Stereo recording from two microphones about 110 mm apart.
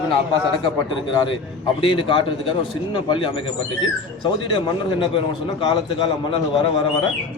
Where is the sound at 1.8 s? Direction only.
50° left (ahead or behind).